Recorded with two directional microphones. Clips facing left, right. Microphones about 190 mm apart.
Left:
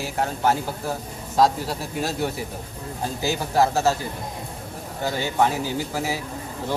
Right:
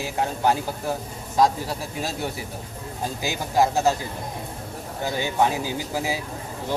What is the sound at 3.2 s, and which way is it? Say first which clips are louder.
Speech: left 1 dB; 15° right (ahead or behind).